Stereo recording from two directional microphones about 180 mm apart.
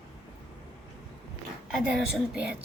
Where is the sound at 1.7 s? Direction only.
5° right (ahead or behind).